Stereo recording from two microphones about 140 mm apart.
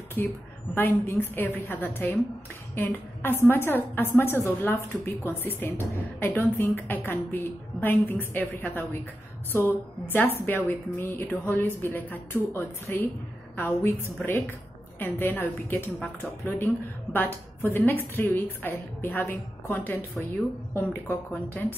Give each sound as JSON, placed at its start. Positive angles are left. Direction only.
{"t": 0.2, "sound": "a woman's voice", "side_deg": 15}